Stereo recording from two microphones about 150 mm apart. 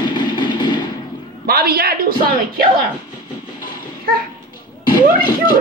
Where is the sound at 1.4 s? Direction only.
90° right.